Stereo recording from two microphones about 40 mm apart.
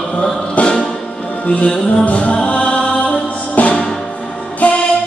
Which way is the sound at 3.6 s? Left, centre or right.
Left.